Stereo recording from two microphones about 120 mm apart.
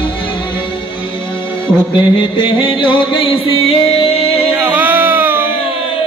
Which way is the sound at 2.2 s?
45° left (ahead or behind).